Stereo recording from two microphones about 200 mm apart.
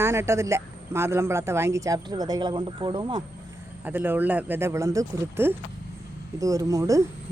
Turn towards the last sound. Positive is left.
turn(degrees=-15)  # may be behind; listen again after turning